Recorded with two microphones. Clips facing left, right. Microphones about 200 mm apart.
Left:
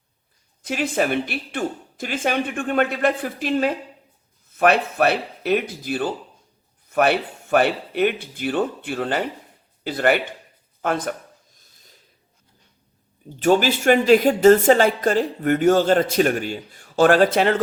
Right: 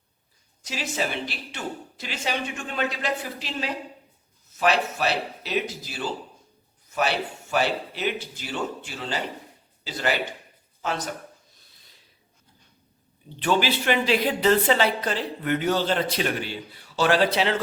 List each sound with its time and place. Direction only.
0.6 s speech: 55° left (ahead or behind)
11.5 s a sound: 45° left (ahead or behind)
13.4 s speech: 45° left (ahead or behind)